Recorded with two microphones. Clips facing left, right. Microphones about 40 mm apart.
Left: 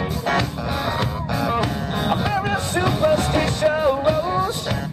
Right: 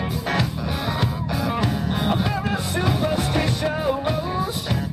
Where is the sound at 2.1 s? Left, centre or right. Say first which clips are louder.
Left 2 dB; centre.